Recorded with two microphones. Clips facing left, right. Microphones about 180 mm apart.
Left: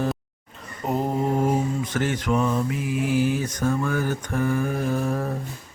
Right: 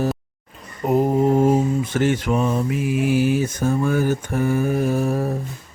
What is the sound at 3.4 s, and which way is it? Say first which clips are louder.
Mantra: right 4 dB; 25° right (ahead or behind).